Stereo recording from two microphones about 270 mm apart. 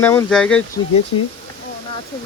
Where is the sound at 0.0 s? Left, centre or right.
Centre.